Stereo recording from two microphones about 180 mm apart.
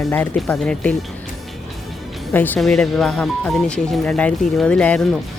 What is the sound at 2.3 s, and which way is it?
Speech, 10° left (ahead or behind).